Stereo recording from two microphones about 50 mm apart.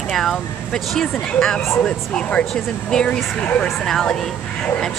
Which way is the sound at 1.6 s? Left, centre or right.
Left.